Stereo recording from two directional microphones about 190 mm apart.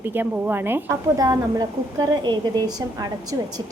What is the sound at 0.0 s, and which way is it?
A woman's voice, 10° right (ahead or behind).